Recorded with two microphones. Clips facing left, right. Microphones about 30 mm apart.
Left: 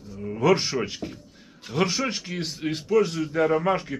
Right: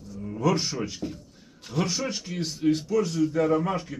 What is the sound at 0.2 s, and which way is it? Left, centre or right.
Speech, left.